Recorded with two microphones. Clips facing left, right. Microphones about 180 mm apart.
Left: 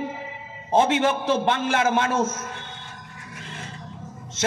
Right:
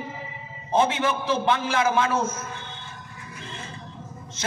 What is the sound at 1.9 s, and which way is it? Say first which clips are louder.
Speech: even; 85° left.